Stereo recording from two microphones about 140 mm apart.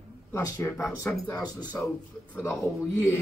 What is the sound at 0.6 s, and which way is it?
Speech, 20° left (ahead or behind).